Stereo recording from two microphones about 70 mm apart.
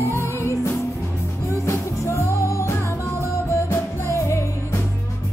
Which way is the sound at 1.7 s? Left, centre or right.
Left.